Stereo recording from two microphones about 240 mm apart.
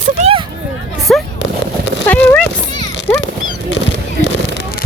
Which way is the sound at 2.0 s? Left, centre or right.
Centre.